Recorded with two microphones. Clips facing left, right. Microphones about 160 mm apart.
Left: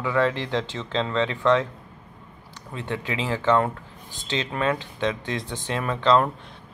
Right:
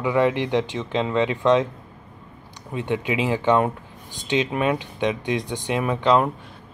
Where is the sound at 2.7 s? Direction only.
15° right (ahead or behind).